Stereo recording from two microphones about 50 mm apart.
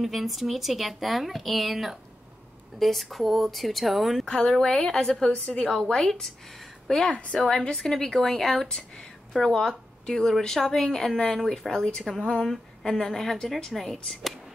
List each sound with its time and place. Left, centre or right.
0.0 s a woman's voice: centre
4.3 s speech: centre
7.1 s a woman's voice: left
7.7 s a woman's voice: centre